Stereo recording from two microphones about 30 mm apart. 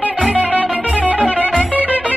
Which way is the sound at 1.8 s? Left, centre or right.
Right.